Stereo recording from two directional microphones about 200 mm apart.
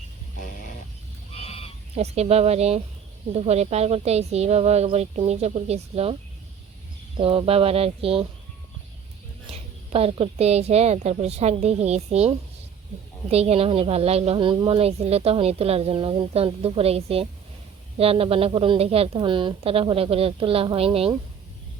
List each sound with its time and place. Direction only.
1.4 s sheep: 30° left (ahead or behind)
2.0 s a woman's voice: 30° right (ahead or behind)
7.2 s speech: 30° right (ahead or behind)
9.5 s a woman's voice: 30° right (ahead or behind)